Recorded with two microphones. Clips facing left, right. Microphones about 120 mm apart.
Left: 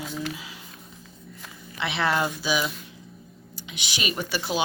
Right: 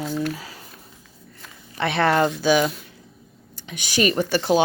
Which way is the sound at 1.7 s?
45° right (ahead or behind).